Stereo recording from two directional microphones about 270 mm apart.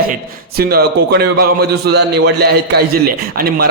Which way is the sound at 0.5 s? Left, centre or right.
Right.